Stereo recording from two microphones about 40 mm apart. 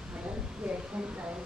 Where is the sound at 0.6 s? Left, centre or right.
Right.